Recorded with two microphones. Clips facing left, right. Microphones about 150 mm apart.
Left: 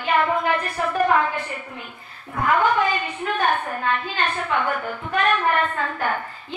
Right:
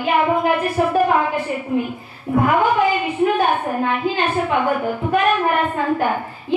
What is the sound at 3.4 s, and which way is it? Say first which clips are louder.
A woman's voice: right 4 dB; 15° right (ahead or behind).